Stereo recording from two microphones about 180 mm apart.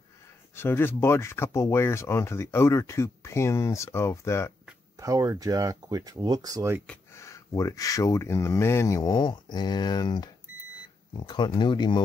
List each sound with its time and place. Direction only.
0.6 s speech: 10° left (ahead or behind)
4.9 s speech: 20° right (ahead or behind)
6.9 s speech: 15° left (ahead or behind)